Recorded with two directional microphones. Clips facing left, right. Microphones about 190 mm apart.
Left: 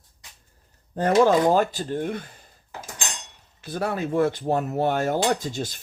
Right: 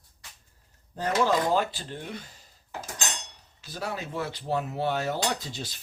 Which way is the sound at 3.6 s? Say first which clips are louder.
Left 8 dB; 55° left (ahead or behind).